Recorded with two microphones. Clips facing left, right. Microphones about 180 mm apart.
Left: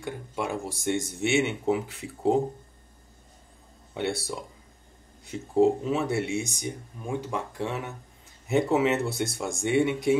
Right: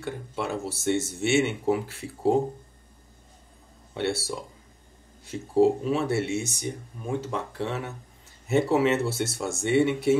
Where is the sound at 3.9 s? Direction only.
15° left (ahead or behind).